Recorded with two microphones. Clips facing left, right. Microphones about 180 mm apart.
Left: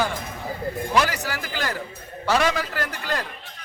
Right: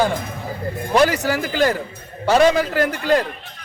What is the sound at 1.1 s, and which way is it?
A man's voice, 20° right (ahead or behind).